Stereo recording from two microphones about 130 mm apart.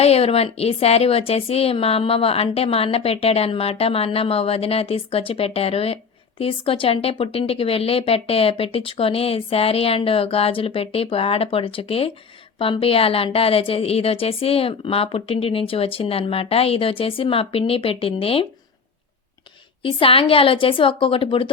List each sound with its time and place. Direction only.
0.0 s a woman's voice: 50° left (ahead or behind)
19.8 s a woman's voice: 45° left (ahead or behind)